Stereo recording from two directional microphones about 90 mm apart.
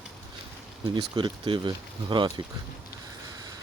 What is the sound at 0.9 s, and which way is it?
Speech, 60° right (ahead or behind).